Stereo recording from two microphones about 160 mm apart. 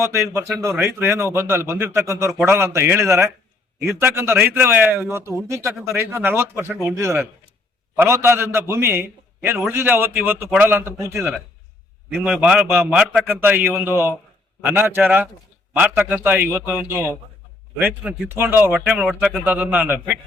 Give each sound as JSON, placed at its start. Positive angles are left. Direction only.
{"t": 0.0, "sound": "a man's voice", "side_deg": -15}